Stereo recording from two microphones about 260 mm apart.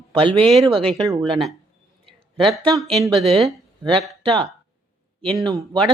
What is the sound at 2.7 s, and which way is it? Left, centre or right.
Speech, centre.